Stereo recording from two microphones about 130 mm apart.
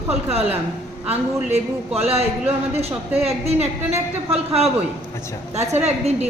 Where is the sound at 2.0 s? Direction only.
50° right (ahead or behind).